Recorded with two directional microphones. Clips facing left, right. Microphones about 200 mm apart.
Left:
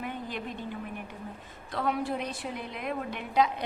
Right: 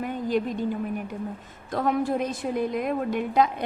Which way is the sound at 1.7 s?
45° right (ahead or behind).